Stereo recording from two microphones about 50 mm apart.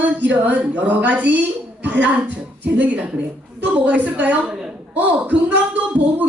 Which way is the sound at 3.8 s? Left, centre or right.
Right.